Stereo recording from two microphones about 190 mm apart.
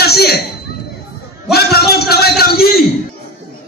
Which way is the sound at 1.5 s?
55° left (ahead or behind).